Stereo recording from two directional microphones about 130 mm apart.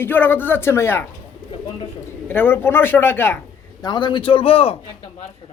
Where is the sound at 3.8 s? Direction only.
35° left (ahead or behind).